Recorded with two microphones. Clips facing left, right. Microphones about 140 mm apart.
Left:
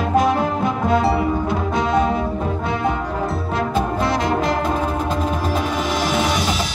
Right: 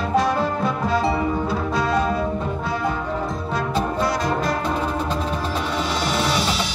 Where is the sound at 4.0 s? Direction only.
25° left (ahead or behind).